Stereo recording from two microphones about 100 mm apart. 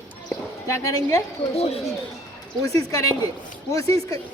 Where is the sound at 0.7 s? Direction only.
30° left (ahead or behind).